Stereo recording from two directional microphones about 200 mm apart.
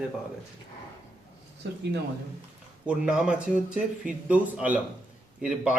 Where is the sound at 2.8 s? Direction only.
5° right (ahead or behind).